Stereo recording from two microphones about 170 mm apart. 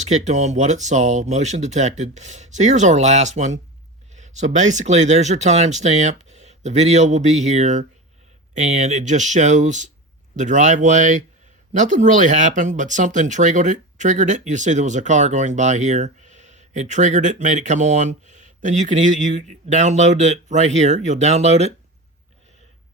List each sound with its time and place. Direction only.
0.1 s speech: 45° right (ahead or behind)